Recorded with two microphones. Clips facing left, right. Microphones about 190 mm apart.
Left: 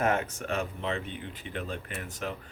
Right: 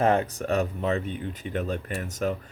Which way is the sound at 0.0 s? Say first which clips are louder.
Right 5 dB; 35° right (ahead or behind).